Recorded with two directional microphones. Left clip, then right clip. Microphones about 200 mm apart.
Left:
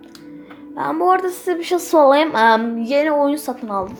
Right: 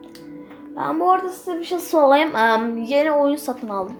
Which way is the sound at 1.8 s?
15° left (ahead or behind).